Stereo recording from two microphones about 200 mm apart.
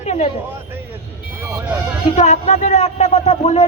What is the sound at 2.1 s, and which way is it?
Speech, 35° left (ahead or behind).